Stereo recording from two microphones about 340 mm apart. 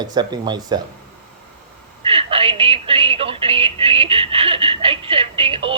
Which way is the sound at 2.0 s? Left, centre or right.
Centre.